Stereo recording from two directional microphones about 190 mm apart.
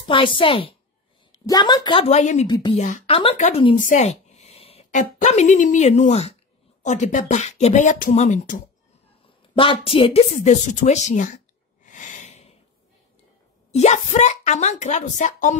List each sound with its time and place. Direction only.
0.0 s a woman's voice: 25° left (ahead or behind)
2.0 s speech: 35° left (ahead or behind)
2.4 s a woman's voice: 20° left (ahead or behind)
2.8 s a woman's voice: 35° left (ahead or behind)
9.6 s a woman's voice: 30° left (ahead or behind)
10.3 s speech: 40° left (ahead or behind)
11.8 s snort: 40° left (ahead or behind)
13.7 s speech: 35° left (ahead or behind)